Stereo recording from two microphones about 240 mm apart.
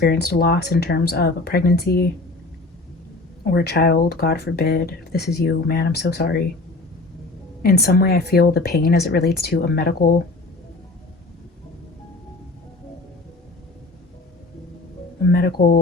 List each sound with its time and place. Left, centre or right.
0.0 s speech: left
3.5 s speech: left
7.6 s speech: left
15.3 s speech: left